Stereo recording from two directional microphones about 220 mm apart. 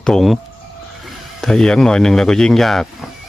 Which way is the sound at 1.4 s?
Centre (ahead or behind).